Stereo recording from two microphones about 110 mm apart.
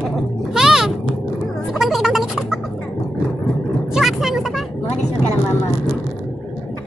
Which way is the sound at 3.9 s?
Centre (ahead or behind).